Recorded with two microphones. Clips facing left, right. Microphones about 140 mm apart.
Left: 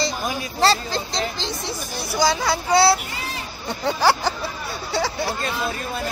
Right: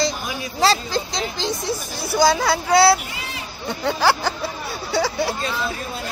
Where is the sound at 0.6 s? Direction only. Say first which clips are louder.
Right 1 dB; 5° right (ahead or behind).